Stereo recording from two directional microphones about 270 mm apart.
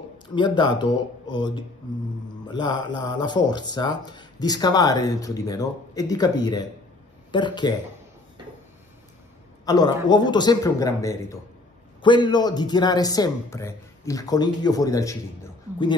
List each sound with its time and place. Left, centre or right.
0.3 s speech: centre
9.7 s speech: centre